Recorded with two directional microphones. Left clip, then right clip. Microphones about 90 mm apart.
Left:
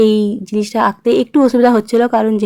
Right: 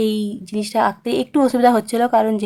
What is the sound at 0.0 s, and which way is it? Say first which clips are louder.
A woman's voice: left 9 dB; 30° left (ahead or behind).